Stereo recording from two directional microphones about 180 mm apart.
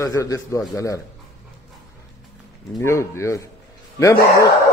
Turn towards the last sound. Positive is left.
turn(degrees=15)  # may be behind; listen again after turning